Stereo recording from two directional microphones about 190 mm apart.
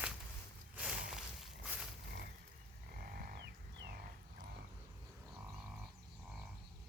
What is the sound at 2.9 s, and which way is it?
Livestock, 50° right (ahead or behind).